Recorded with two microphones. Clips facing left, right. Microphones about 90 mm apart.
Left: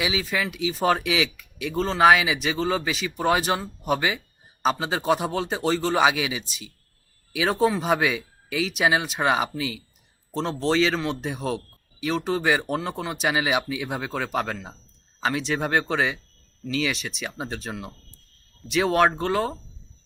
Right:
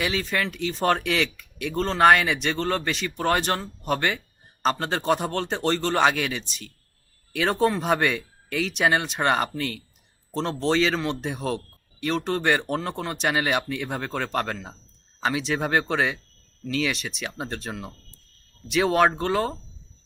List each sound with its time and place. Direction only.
0.0 s a man's voice: 5° left (ahead or behind)